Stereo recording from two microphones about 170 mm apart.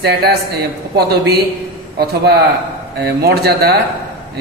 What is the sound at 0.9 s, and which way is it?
Speech, 70° right (ahead or behind).